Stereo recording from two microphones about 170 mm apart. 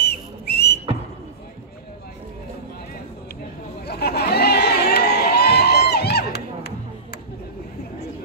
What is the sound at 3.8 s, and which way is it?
Crowd, 70° left (ahead or behind).